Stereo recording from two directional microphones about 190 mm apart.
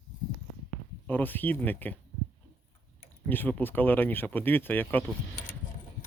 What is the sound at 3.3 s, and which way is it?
Speech, 10° left (ahead or behind).